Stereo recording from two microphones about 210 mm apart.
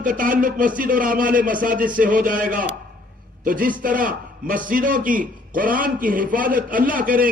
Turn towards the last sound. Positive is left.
turn(degrees=-40)  # may be behind; listen again after turning